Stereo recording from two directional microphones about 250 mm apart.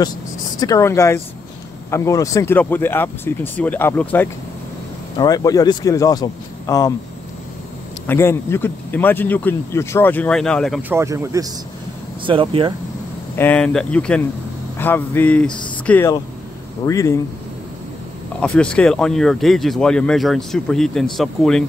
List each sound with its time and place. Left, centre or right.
0.6 s speech: centre
8.1 s speech: centre; by 12.7 s right
13.4 s speech: centre
18.4 s speech: centre